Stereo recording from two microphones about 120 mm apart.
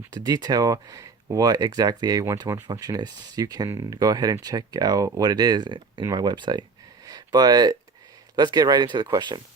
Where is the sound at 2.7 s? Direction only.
30° right (ahead or behind).